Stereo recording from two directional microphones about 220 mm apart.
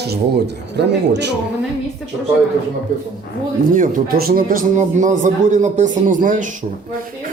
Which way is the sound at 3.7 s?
40° right (ahead or behind).